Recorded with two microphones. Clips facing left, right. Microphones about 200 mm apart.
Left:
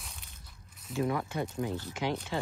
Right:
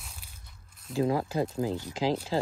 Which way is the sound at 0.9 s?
30° right (ahead or behind).